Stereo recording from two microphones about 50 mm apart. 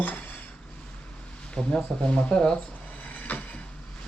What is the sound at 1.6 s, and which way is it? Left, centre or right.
Speech, centre.